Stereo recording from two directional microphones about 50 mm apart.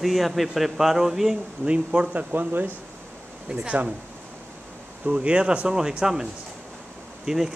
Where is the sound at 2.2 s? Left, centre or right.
Right.